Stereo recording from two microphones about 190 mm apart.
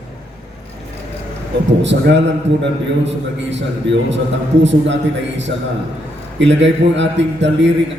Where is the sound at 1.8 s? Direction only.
70° right (ahead or behind).